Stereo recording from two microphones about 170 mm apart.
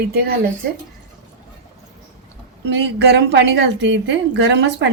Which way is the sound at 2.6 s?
90° right.